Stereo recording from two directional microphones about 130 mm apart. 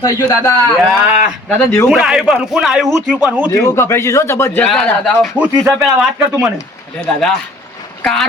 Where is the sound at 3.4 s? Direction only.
25° left (ahead or behind).